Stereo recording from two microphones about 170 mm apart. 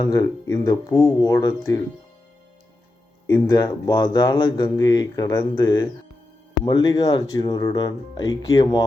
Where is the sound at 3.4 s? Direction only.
25° left (ahead or behind).